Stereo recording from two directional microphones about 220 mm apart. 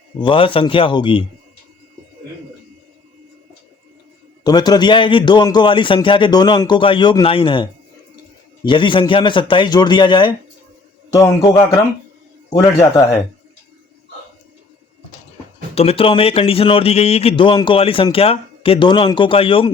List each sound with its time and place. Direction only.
0.2 s speech: 25° left (ahead or behind)
4.4 s a man's voice: 20° left (ahead or behind)
15.7 s speech: 25° left (ahead or behind)